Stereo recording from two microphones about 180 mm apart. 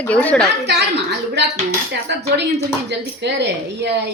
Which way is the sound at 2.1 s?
65° right (ahead or behind).